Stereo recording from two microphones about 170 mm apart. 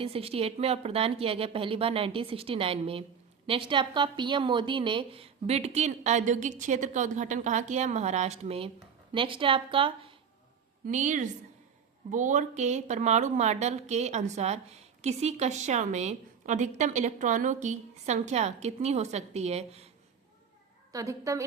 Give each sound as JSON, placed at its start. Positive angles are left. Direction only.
{"t": 0.0, "sound": "a woman's voice", "side_deg": -35}
{"t": 10.8, "sound": "speech", "side_deg": -45}
{"t": 20.9, "sound": "a woman's voice", "side_deg": -20}